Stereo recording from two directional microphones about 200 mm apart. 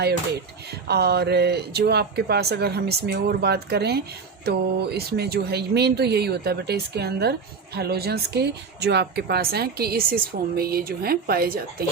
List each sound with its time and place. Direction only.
0.0 s speech: 55° right (ahead or behind)